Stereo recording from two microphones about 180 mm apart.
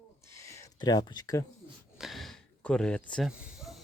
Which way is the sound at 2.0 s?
Centre (ahead or behind).